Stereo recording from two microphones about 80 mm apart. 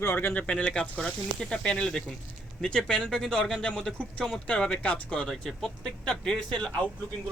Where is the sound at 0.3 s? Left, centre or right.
Centre.